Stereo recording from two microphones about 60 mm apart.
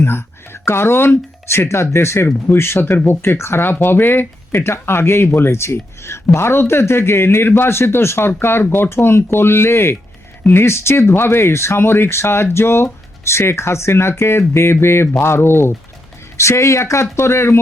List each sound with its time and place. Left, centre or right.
0.0 s speech: left
16.4 s speech: left